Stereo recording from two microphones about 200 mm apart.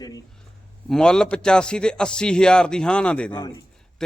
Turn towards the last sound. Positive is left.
turn(degrees=5)  # may be behind; listen again after turning